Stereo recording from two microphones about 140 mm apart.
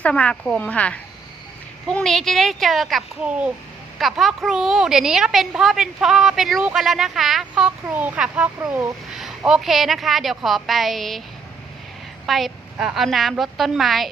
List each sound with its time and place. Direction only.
0.0 s a woman's voice: 10° left (ahead or behind); by 8.4 s 10° right (ahead or behind)
8.6 s speech: 20° right (ahead or behind)
9.1 s a woman's voice: 5° right (ahead or behind)
12.2 s a woman's voice: centre (ahead or behind)